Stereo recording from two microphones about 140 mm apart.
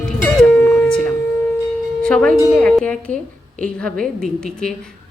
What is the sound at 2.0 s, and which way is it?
Speech, 5° left (ahead or behind).